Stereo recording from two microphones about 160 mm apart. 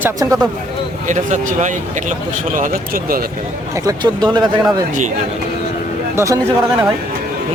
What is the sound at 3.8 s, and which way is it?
Speech, 25° right (ahead or behind).